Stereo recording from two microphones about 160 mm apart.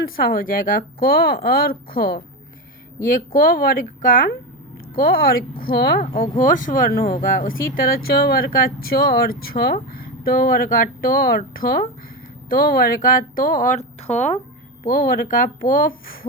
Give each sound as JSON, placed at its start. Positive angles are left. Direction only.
{"t": 0.0, "sound": "a woman's voice", "side_deg": 65}
{"t": 3.0, "sound": "a woman's voice", "side_deg": 60}
{"t": 6.1, "sound": "speech", "side_deg": 55}
{"t": 14.8, "sound": "speech", "side_deg": 65}